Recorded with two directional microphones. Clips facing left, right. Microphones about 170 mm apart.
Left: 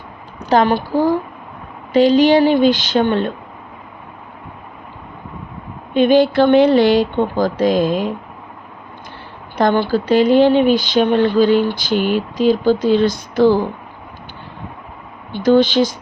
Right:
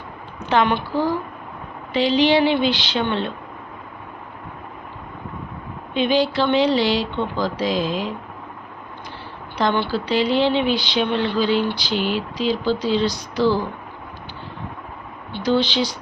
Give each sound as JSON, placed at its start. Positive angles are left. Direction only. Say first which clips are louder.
{"t": 0.4, "sound": "a woman's voice", "louder": "left 5 dB", "side_deg": 40}
{"t": 5.9, "sound": "speech", "louder": "left 7 dB", "side_deg": 50}
{"t": 9.6, "sound": "speech", "louder": "left 6 dB", "side_deg": 45}
{"t": 15.3, "sound": "speech", "louder": "left 7 dB", "side_deg": 50}